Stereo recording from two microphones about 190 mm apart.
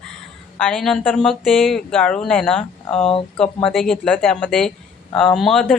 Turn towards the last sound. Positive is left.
turn(degrees=0)  # may be behind; listen again after turning